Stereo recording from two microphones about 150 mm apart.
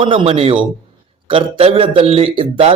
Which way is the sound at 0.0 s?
40° right (ahead or behind).